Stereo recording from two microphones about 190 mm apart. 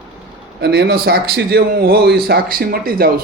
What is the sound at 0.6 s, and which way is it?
A man's voice, 60° right (ahead or behind).